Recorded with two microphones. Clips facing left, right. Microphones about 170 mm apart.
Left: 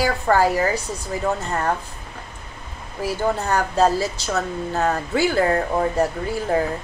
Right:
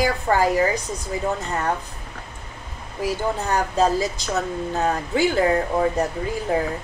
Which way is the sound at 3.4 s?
15° right (ahead or behind).